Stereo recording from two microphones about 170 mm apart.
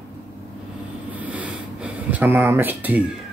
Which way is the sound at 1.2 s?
10° right (ahead or behind).